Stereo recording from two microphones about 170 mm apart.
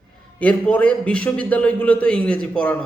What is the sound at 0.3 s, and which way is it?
A man's voice, 10° left (ahead or behind).